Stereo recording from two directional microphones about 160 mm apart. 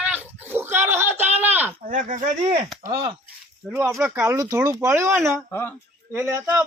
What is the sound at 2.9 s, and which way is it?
Speech, 30° right (ahead or behind).